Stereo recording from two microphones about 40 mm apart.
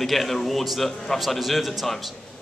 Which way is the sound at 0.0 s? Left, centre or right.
Centre.